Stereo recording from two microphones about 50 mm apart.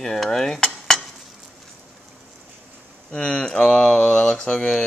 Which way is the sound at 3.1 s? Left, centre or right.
Left.